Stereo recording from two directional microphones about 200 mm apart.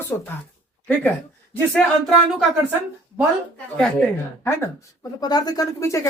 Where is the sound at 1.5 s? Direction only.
10° left (ahead or behind).